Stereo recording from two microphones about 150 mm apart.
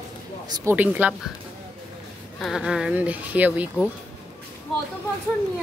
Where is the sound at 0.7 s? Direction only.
10° right (ahead or behind).